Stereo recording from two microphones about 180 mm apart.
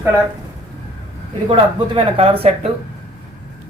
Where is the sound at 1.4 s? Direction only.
30° right (ahead or behind).